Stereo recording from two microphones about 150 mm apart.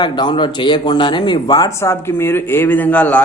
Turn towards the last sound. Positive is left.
turn(degrees=10)  # may be behind; listen again after turning